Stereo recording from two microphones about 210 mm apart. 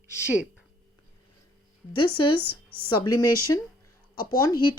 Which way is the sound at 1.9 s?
20° left (ahead or behind).